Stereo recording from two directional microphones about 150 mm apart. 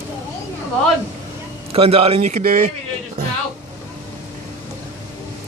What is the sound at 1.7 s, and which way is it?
Speech, 40° right (ahead or behind).